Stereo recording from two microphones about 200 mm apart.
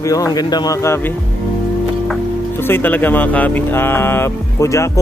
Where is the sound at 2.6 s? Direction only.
10° left (ahead or behind).